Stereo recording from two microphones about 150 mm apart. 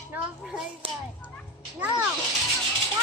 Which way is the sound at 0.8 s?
35° right (ahead or behind).